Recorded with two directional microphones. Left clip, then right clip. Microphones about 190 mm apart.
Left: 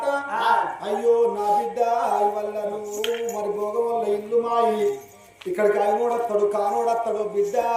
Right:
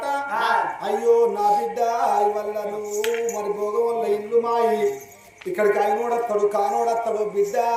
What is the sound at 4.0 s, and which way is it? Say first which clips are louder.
Music: right 1 dB; 10° right (ahead or behind).